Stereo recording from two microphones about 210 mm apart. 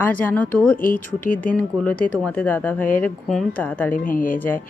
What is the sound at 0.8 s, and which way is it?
Speech, 40° left (ahead or behind).